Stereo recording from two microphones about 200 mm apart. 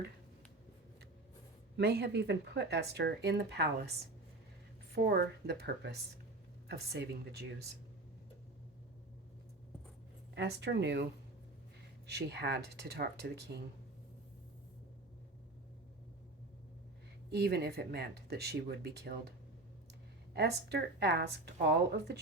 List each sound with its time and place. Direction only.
1.7 s a woman's voice: 55° right (ahead or behind)
5.0 s a woman's voice: 55° right (ahead or behind)
10.3 s a woman's voice: 60° right (ahead or behind)
17.2 s a woman's voice: 55° right (ahead or behind)
20.3 s a woman's voice: 55° right (ahead or behind)